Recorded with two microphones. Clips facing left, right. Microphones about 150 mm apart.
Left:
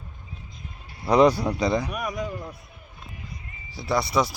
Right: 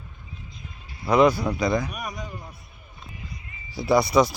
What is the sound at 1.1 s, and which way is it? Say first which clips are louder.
Speech: left 1 dB; 35° left (ahead or behind).